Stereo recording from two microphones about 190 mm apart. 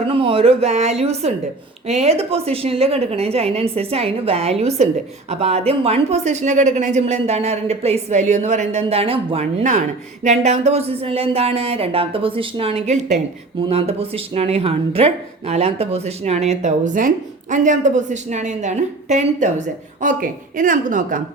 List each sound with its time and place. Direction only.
0.1 s a woman's voice: 30° right (ahead or behind); by 21.2 s 45° right (ahead or behind)